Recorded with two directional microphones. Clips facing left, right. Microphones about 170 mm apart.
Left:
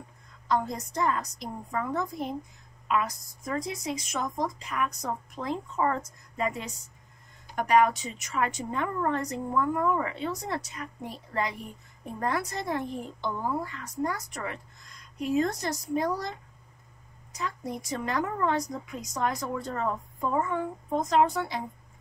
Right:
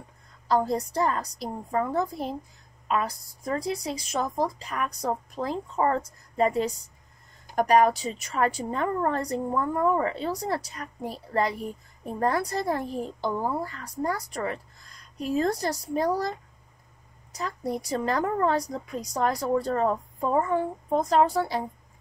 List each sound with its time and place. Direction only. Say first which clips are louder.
0.5 s a woman's voice: right 4 dB; 35° right (ahead or behind)